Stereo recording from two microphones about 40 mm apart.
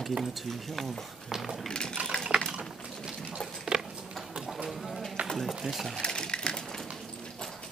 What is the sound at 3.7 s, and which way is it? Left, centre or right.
Tick-tock, centre.